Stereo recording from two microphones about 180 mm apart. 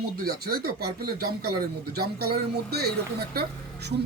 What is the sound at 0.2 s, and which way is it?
Speech, 60° right (ahead or behind).